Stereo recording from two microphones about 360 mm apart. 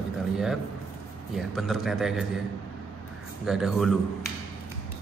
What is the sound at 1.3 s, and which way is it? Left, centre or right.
Speech, centre.